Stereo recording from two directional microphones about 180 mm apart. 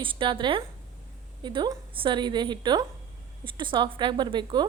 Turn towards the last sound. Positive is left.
turn(degrees=-25)  # may be behind; listen again after turning